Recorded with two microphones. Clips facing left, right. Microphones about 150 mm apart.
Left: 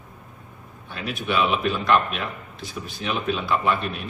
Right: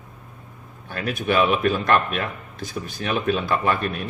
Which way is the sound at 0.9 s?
45° right (ahead or behind).